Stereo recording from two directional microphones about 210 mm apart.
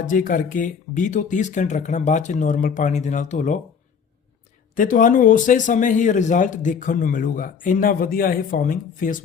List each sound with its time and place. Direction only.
0.1 s a man's voice: 40° left (ahead or behind)
4.7 s a man's voice: 40° left (ahead or behind)